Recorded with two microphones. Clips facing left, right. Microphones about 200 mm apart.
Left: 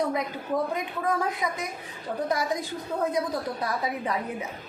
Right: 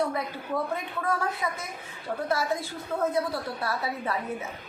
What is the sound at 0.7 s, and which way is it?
A woman's voice, 15° left (ahead or behind).